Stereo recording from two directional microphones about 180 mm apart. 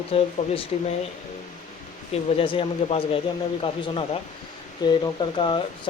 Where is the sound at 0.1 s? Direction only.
30° left (ahead or behind).